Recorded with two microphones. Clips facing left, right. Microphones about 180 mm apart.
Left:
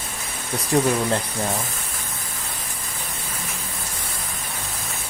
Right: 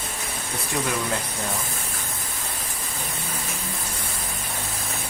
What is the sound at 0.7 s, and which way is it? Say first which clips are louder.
Speech: left 9 dB; 35° left (ahead or behind).